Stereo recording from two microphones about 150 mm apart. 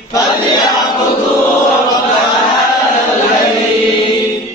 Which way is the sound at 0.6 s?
30° left (ahead or behind).